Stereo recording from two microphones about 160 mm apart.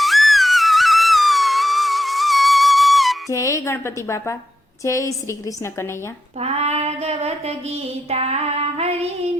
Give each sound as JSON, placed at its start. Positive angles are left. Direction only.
{"t": 0.0, "sound": "music", "side_deg": 0}
{"t": 3.2, "sound": "a woman's voice", "side_deg": 20}
{"t": 6.4, "sound": "child singing", "side_deg": -40}